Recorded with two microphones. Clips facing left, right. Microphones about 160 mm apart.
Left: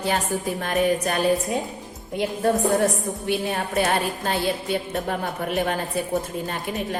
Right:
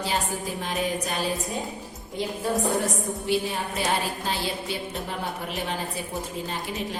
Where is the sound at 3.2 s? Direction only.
60° left (ahead or behind).